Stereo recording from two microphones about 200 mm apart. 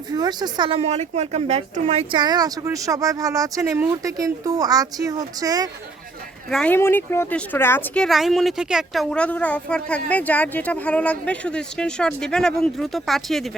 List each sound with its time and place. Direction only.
0.1 s a woman's voice: 20° right (ahead or behind)
6.5 s speech: 5° left (ahead or behind)